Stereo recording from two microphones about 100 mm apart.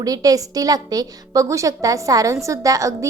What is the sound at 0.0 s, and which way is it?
A woman's voice, 35° right (ahead or behind).